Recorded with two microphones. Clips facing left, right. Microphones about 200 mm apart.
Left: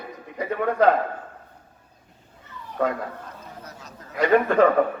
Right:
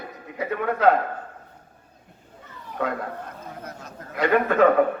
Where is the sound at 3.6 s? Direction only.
55° right (ahead or behind).